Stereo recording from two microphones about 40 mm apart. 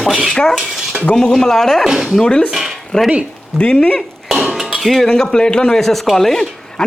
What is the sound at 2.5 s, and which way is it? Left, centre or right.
Speech, centre.